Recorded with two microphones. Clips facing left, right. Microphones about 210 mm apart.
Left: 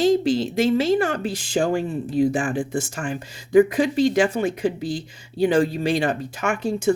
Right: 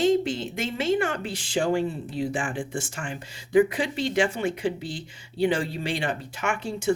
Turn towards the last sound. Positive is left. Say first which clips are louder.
# left 6 dB
turn(degrees=40)  # may be behind; listen again after turning